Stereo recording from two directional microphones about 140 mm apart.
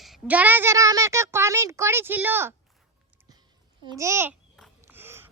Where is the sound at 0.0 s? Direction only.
5° right (ahead or behind).